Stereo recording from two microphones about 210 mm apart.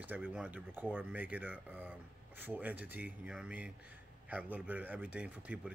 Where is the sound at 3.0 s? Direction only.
5° right (ahead or behind).